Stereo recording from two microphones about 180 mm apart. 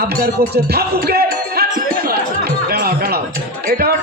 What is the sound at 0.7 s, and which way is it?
Music, 60° right (ahead or behind).